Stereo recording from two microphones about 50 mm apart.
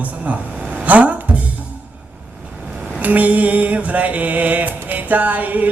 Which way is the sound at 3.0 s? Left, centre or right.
Right.